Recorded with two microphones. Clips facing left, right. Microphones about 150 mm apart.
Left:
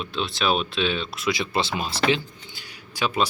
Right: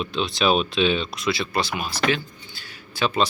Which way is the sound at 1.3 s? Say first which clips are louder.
Even; 20° left (ahead or behind).